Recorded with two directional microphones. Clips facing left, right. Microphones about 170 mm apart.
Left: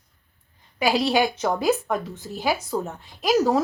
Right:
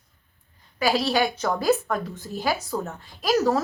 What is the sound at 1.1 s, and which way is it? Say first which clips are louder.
Speech: left 2 dB; 10° left (ahead or behind).